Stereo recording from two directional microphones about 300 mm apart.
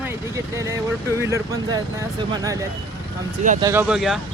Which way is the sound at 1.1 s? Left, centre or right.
Centre.